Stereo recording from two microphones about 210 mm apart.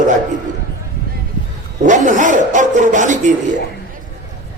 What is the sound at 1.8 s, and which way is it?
Speech, 35° right (ahead or behind).